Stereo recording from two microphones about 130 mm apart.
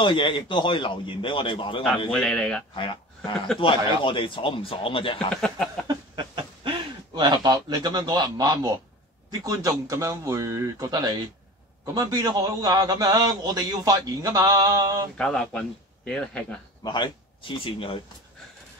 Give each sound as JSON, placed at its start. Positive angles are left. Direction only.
{"t": 0.0, "sound": "a man's voice", "side_deg": 40}
{"t": 2.0, "sound": "speech", "side_deg": 5}
{"t": 2.7, "sound": "a man's voice", "side_deg": 40}
{"t": 5.3, "sound": "a sound", "side_deg": 5}
{"t": 5.9, "sound": "a sound", "side_deg": -40}
{"t": 9.3, "sound": "a man's voice", "side_deg": -25}
{"t": 15.1, "sound": "speech", "side_deg": 5}
{"t": 16.8, "sound": "a man's voice", "side_deg": 35}